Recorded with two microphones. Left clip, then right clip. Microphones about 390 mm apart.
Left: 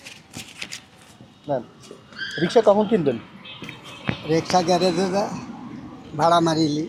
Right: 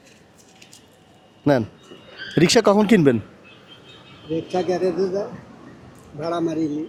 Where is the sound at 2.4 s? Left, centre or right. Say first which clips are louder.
Right 1 dB; right.